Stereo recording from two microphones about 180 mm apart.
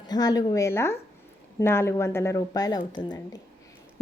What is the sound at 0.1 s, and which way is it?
A woman's voice, 20° left (ahead or behind).